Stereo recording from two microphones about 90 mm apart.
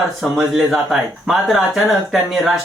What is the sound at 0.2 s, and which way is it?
Speech, 5° right (ahead or behind).